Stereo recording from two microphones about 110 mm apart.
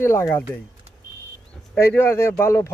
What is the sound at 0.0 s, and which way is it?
Speech, 25° left (ahead or behind).